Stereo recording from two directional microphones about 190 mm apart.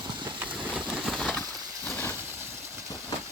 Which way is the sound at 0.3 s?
10° right (ahead or behind).